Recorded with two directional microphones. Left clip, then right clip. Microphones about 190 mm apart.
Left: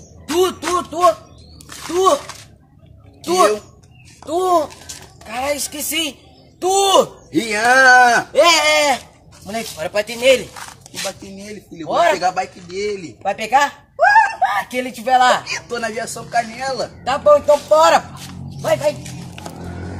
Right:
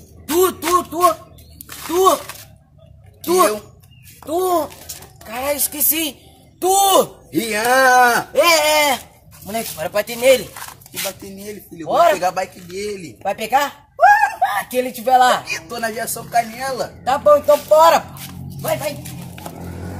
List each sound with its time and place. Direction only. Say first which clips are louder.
0.4 s speech: right 2 dB; 10° right (ahead or behind)
1.7 s a sound: even; centre (ahead or behind)
3.2 s a man's voice: left 1 dB; centre (ahead or behind)
7.3 s speech: left 2 dB; 5° left (ahead or behind)
11.4 s speech: right 1 dB; 10° left (ahead or behind)
11.9 s a man's voice: right 1 dB; 10° right (ahead or behind)
13.2 s a man's voice: left 2 dB; 15° right (ahead or behind)
13.9 s wail: even; 5° left (ahead or behind)
14.4 s a man's voice: even; 10° right (ahead or behind)
15.4 s speech: even; 5° left (ahead or behind)
17.0 s a man's voice: even; 10° right (ahead or behind)
18.6 s a sound: left 5 dB; centre (ahead or behind)